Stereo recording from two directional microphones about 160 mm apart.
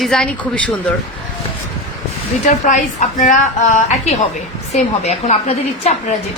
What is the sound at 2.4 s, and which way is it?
A woman's voice, 50° left (ahead or behind).